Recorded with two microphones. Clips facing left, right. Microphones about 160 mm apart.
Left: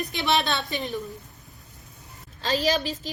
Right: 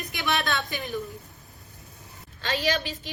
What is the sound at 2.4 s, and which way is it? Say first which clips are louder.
Speech: left 3 dB; 35° left (ahead or behind).